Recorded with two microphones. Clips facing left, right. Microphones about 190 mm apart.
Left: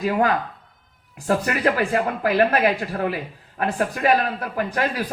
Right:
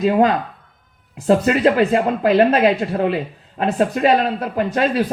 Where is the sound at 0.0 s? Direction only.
20° right (ahead or behind).